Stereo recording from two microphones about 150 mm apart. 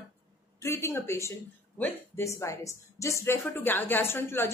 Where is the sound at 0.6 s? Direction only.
20° left (ahead or behind).